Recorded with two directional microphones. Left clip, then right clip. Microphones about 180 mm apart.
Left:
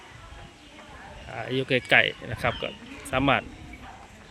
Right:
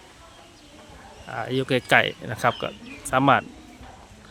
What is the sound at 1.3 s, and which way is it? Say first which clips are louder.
Speech: right 2 dB; 15° right (ahead or behind).